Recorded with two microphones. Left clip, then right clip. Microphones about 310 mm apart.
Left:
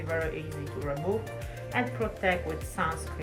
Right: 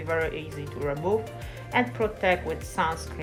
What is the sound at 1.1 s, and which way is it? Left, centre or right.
A woman's voice, right.